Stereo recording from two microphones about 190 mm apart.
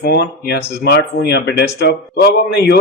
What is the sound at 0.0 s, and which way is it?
A man's voice, 55° left (ahead or behind).